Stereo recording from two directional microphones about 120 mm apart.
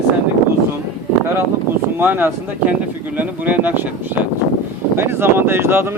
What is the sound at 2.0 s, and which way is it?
Speech, 15° right (ahead or behind).